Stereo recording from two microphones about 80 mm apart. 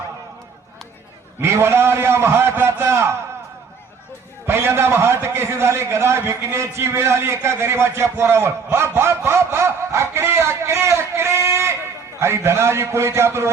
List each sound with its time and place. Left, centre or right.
1.4 s a man's voice: right
4.4 s a man's voice: right